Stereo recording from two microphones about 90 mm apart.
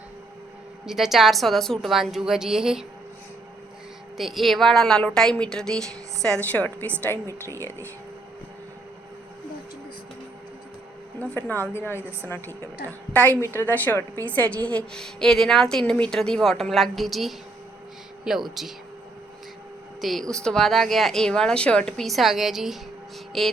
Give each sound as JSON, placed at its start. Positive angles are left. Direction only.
{"t": 0.9, "sound": "speech", "side_deg": -5}
{"t": 4.2, "sound": "a woman's voice", "side_deg": 0}
{"t": 6.4, "sound": "a woman's voice", "side_deg": 20}
{"t": 7.4, "sound": "a woman's voice", "side_deg": 30}
{"t": 11.2, "sound": "a woman's voice", "side_deg": 20}
{"t": 13.4, "sound": "a woman's voice", "side_deg": 25}
{"t": 20.0, "sound": "speech", "side_deg": 0}